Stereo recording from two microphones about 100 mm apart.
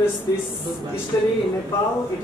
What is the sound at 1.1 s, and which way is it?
Speech, 35° left (ahead or behind).